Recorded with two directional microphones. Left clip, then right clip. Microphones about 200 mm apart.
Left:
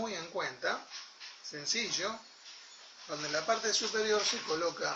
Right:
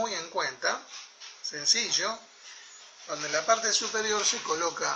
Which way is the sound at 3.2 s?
15° right (ahead or behind).